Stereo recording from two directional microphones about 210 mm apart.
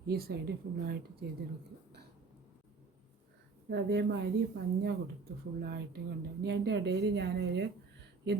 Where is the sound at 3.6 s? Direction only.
55° right (ahead or behind).